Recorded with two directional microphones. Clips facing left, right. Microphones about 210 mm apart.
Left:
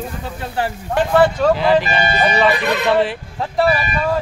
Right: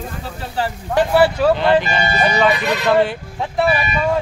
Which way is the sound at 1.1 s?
10° right (ahead or behind).